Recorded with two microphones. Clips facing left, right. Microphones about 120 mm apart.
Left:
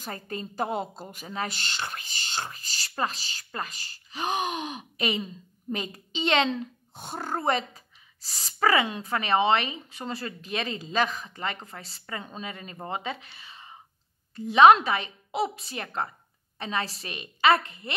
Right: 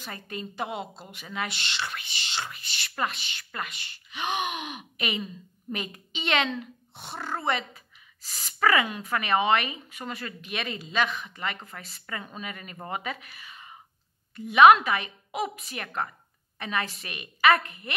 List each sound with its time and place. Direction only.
0.0 s a woman's voice: 35° left (ahead or behind)